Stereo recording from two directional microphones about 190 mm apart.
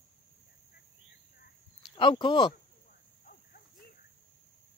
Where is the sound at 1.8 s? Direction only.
25° left (ahead or behind).